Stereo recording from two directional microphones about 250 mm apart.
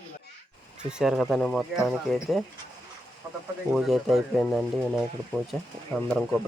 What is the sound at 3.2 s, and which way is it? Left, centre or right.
Bird, centre.